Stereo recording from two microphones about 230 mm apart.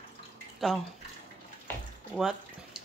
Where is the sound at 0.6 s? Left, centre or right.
Centre.